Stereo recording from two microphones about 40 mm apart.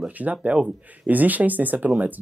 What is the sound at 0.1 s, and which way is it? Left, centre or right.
Speech, right.